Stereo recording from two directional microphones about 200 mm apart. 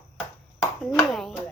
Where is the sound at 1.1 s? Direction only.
Centre (ahead or behind).